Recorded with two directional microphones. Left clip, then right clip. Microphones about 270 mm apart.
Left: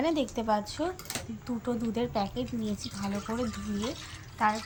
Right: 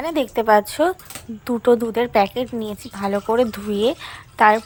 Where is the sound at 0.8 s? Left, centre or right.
Right.